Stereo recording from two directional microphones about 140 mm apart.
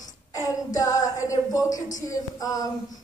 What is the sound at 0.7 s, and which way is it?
Speech, 25° left (ahead or behind).